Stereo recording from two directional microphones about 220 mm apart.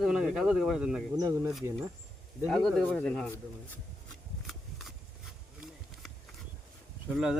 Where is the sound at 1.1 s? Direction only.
15° right (ahead or behind); by 3.3 s 5° left (ahead or behind).